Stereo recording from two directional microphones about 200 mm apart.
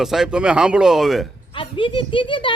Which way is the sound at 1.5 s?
25° left (ahead or behind).